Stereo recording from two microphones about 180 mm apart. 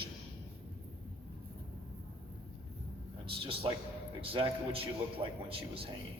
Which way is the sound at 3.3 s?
30° right (ahead or behind).